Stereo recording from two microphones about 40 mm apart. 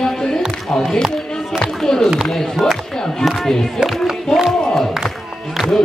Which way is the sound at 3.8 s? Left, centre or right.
Centre.